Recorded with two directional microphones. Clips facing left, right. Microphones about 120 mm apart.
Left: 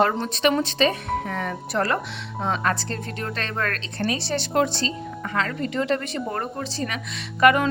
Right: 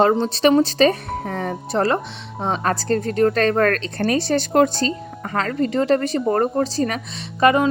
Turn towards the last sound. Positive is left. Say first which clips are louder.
# right 2 dB
turn(degrees=-25)  # may be behind; listen again after turning